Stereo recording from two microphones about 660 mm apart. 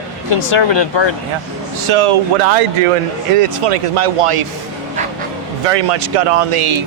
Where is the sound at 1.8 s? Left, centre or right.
Right.